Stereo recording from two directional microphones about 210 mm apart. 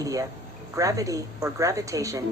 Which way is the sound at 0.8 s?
15° right (ahead or behind).